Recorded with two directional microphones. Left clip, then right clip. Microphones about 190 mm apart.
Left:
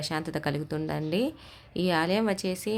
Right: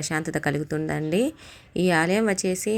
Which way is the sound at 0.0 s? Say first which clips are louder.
Right 5 dB; 15° right (ahead or behind).